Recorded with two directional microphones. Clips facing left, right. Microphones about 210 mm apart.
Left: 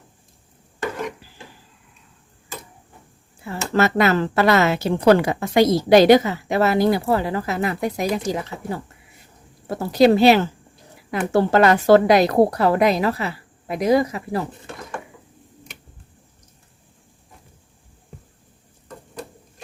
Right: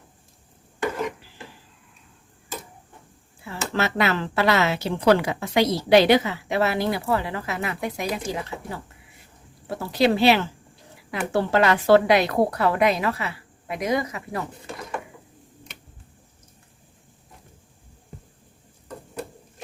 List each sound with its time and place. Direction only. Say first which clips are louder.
0.9 s rub: right 1 dB; centre (ahead or behind)
3.4 s speech: left 6 dB; 45° left (ahead or behind)
9.6 s a woman's voice: left 6 dB; 45° left (ahead or behind)
14.7 s speech: even; 5° right (ahead or behind)